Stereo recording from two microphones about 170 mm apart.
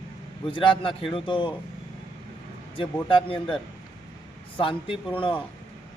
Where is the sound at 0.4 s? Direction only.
30° left (ahead or behind).